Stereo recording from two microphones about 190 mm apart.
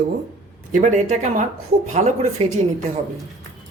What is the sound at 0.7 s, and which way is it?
Speech, 40° right (ahead or behind).